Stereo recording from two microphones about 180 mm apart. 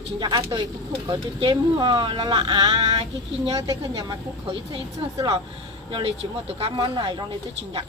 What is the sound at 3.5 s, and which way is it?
Speech, 20° right (ahead or behind).